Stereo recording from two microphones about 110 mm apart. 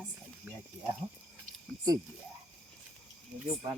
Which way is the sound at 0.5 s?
15° right (ahead or behind).